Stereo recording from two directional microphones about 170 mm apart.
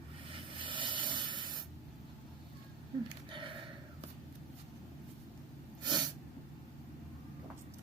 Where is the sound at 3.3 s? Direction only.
30° right (ahead or behind).